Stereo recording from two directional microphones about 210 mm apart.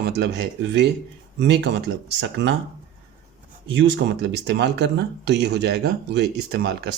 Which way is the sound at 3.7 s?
60° right (ahead or behind).